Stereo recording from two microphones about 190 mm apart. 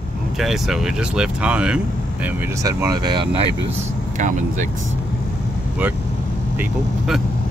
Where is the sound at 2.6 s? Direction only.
20° right (ahead or behind).